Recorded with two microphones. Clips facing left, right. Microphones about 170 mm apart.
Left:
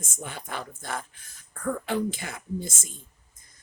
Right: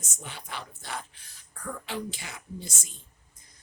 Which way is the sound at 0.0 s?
50° left (ahead or behind).